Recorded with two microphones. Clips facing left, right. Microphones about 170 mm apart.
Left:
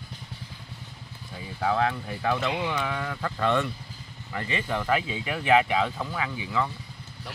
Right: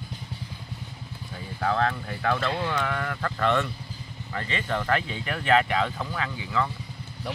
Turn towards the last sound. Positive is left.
turn(degrees=15)  # may be behind; listen again after turning